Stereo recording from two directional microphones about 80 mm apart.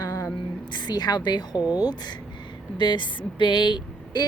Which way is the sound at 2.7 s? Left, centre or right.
Left.